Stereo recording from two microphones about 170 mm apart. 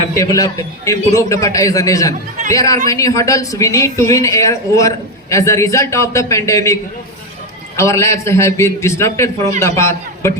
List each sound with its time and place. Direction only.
0.1 s speech: 20° left (ahead or behind)
7.8 s a man's voice: 15° left (ahead or behind)